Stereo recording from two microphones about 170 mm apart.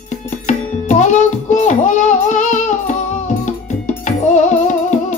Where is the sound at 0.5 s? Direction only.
45° left (ahead or behind).